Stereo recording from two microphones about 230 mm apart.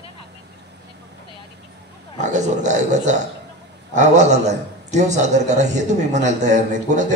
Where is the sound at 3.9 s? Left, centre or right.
Right.